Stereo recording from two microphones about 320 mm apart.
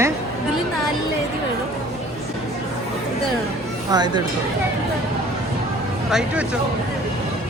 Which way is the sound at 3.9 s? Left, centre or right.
Centre.